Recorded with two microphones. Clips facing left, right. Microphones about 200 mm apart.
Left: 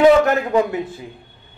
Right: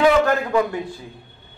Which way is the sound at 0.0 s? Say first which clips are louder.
Left 4 dB; 20° left (ahead or behind).